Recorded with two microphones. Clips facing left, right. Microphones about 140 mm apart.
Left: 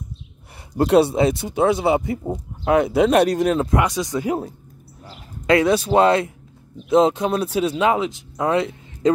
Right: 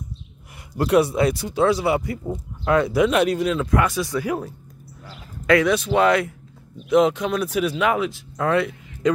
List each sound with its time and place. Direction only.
0.7 s speech: 30° left (ahead or behind)
3.1 s speech: 40° left (ahead or behind)
3.6 s speech: 20° left (ahead or behind)